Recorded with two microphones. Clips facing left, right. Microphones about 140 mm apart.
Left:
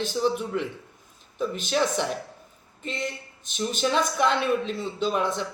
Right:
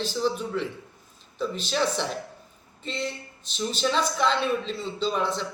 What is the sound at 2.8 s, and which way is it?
Speech, 50° left (ahead or behind).